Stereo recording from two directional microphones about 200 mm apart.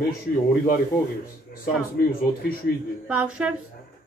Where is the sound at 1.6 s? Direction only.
45° left (ahead or behind).